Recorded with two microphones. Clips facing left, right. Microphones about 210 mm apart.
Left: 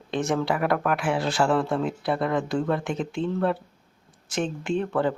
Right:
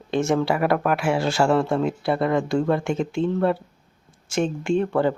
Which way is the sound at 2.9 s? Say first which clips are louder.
Right 4 dB; 45° right (ahead or behind).